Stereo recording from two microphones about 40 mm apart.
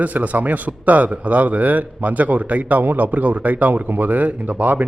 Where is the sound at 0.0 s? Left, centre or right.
Right.